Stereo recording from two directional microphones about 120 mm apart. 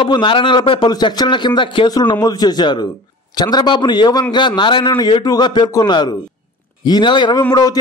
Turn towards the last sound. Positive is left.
turn(degrees=35)  # may be behind; listen again after turning